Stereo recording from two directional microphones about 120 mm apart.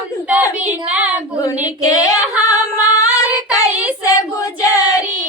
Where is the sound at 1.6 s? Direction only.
30° left (ahead or behind).